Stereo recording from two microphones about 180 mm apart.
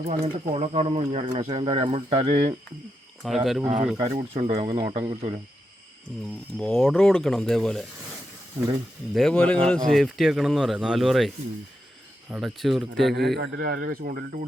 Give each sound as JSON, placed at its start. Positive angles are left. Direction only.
{"t": 0.0, "sound": "speech", "side_deg": -35}
{"t": 3.2, "sound": "speech", "side_deg": 0}
{"t": 3.9, "sound": "speech", "side_deg": -35}
{"t": 6.1, "sound": "speech", "side_deg": 0}
{"t": 9.1, "sound": "speech", "side_deg": 5}
{"t": 12.3, "sound": "speech", "side_deg": 0}
{"t": 13.1, "sound": "a man's voice", "side_deg": -65}